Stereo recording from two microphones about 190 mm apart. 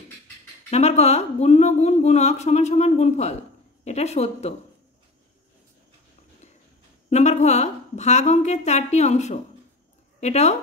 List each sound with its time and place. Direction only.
0.7 s speech: 35° left (ahead or behind)
7.1 s speech: 35° left (ahead or behind)